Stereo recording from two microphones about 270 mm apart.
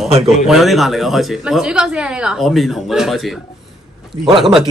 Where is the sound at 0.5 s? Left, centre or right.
Centre.